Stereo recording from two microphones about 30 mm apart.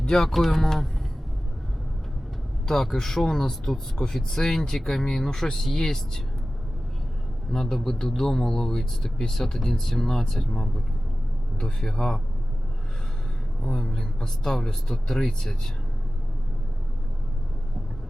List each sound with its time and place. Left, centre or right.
0.1 s speech: centre
2.6 s speech: centre
4.4 s speech: left
7.5 s speech: centre
11.9 s speech: left
13.6 s speech: centre